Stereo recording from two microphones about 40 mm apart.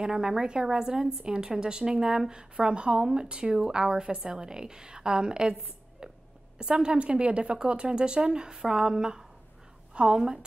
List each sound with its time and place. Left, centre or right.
0.0 s a woman's voice: centre